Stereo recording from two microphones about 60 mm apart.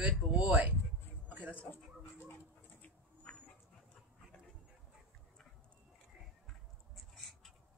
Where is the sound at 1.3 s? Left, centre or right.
Right.